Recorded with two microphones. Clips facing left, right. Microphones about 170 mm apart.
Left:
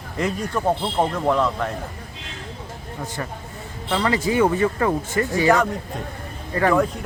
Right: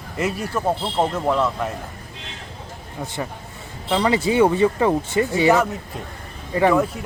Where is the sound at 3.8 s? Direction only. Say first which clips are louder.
Right 2 dB; 15° right (ahead or behind).